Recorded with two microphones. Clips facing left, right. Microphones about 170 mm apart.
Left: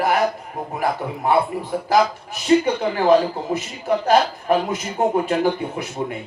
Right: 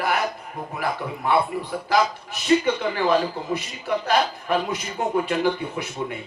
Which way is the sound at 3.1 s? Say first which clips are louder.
Left 7 dB; 45° left (ahead or behind).